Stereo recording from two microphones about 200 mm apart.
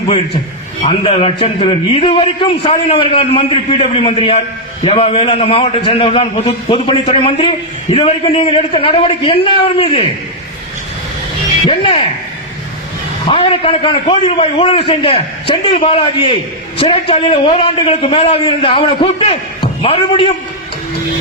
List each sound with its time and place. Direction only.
0.9 s a man's voice: 25° left (ahead or behind)
11.6 s a man's voice: 30° left (ahead or behind)
13.2 s a man's voice: 25° left (ahead or behind)